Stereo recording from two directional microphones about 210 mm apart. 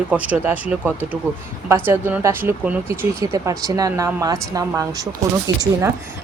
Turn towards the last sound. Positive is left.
turn(degrees=-20)  # may be behind; listen again after turning